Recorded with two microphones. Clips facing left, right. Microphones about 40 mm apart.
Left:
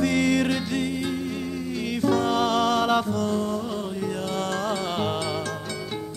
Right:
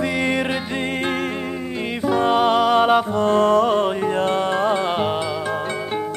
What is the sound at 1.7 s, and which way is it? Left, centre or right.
Music, right.